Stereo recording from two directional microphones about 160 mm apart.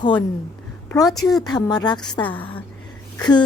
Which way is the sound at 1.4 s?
25° left (ahead or behind).